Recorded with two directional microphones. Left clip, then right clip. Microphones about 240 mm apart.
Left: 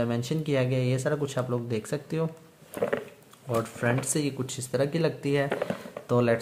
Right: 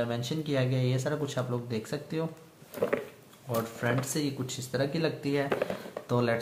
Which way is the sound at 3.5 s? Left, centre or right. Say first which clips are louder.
Left 3 dB; left.